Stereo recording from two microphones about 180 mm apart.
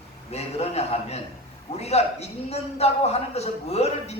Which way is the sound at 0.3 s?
35° left (ahead or behind).